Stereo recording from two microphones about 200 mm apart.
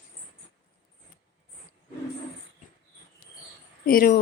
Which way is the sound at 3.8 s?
45° left (ahead or behind).